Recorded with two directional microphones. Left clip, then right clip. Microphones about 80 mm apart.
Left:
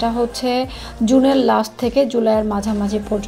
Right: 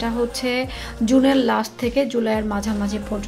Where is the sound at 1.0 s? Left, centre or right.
Centre.